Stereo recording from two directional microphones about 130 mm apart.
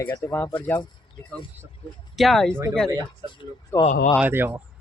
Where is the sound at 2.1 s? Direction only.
Centre (ahead or behind).